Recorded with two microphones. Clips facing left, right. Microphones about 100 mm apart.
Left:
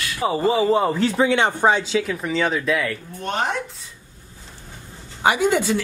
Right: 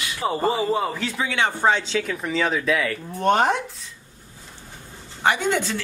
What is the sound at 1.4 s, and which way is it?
Speech, 15° left (ahead or behind).